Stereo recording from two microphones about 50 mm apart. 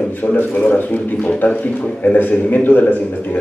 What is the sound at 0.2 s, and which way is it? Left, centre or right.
A man's voice, left.